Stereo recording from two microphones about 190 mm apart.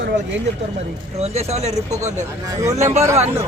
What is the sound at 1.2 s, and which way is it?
Speech, 35° right (ahead or behind).